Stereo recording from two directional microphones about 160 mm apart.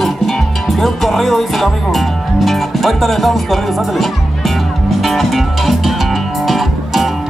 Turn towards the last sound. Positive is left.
turn(degrees=0)  # may be behind; listen again after turning